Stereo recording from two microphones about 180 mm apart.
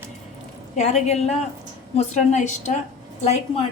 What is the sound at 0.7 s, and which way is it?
A woman's voice, 40° left (ahead or behind).